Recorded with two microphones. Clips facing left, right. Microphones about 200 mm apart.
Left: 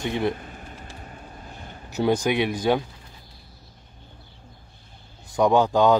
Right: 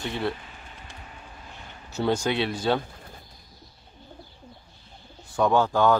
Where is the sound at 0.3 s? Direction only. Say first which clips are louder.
Left 4 dB; 45° left (ahead or behind).